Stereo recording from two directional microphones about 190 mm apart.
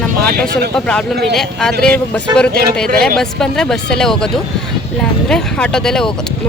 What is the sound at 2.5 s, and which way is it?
Speech, 55° right (ahead or behind).